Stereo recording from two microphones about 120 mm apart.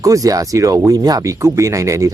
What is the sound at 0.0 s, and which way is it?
Speech, 30° right (ahead or behind).